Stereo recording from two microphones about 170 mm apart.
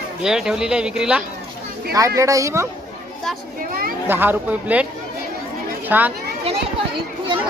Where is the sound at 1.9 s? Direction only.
20° right (ahead or behind).